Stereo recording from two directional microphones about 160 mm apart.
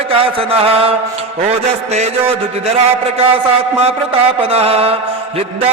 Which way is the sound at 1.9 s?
40° right (ahead or behind).